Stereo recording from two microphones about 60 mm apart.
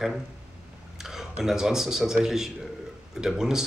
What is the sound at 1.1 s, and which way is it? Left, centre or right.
Speech, centre.